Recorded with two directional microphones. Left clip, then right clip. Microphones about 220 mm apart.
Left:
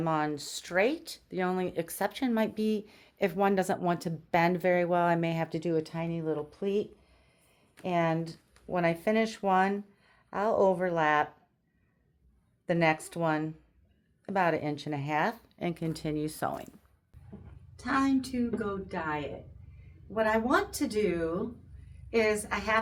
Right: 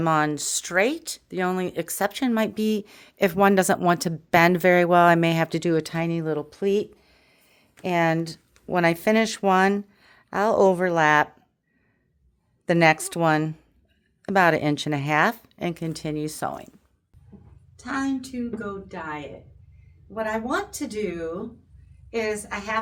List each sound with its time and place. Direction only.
0.0 s speech: 45° right (ahead or behind)
12.6 s speech: 55° right (ahead or behind); by 16.6 s 20° right (ahead or behind)
17.7 s a woman's voice: 5° left (ahead or behind)